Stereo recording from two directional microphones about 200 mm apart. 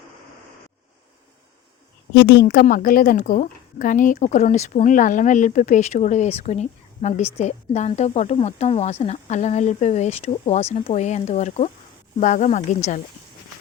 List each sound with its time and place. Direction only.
2.1 s a woman's voice: 55° left (ahead or behind); by 13.0 s 35° left (ahead or behind)